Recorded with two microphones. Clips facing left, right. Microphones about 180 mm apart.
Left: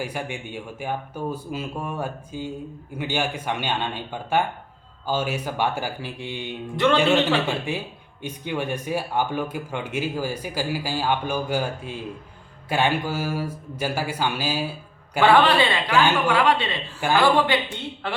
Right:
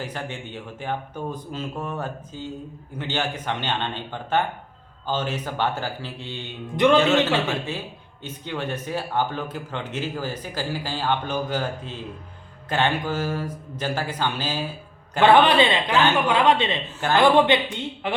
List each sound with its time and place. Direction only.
0.0 s speech: 10° left (ahead or behind)
15.2 s a man's voice: 20° right (ahead or behind)
15.9 s speech: 10° left (ahead or behind)
16.3 s a man's voice: 20° right (ahead or behind)